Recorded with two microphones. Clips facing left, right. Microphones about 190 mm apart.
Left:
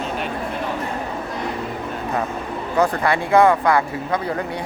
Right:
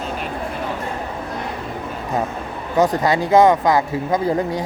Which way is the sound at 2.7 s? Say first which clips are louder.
Right 2 dB; 20° right (ahead or behind).